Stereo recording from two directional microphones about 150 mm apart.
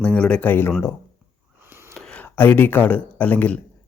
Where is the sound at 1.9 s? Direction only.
5° left (ahead or behind).